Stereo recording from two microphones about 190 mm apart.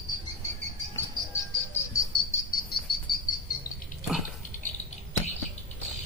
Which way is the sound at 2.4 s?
50° left (ahead or behind).